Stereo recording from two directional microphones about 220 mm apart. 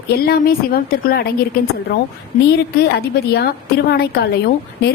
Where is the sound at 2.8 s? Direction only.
45° left (ahead or behind).